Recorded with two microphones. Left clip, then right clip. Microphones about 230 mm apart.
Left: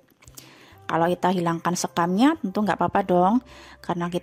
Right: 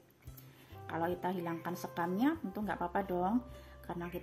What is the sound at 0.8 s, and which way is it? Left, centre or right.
Speech, left.